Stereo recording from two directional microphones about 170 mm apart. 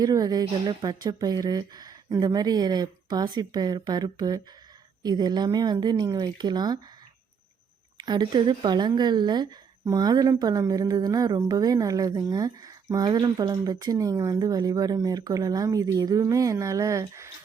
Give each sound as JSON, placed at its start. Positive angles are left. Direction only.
{"t": 0.0, "sound": "speech", "side_deg": -20}
{"t": 7.9, "sound": "speech", "side_deg": -25}